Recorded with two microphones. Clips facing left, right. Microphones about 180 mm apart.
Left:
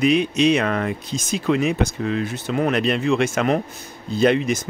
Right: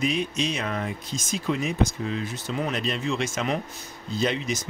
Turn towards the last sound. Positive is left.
turn(degrees=55)  # may be behind; listen again after turning